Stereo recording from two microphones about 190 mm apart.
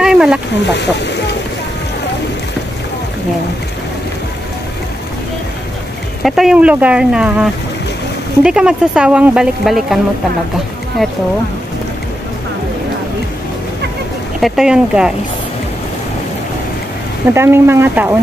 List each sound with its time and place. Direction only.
0.0 s a sound: 5° right (ahead or behind)
0.7 s speech: 65° left (ahead or behind)
6.2 s speech: centre (ahead or behind)
14.4 s speech: centre (ahead or behind)
17.3 s speech: 10° right (ahead or behind)